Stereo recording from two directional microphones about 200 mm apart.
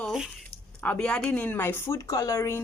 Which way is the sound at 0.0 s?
Centre (ahead or behind).